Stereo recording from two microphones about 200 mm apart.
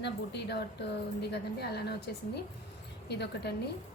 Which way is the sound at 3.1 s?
55° left (ahead or behind).